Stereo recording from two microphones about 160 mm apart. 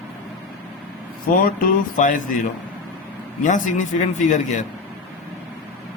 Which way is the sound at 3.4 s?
50° left (ahead or behind).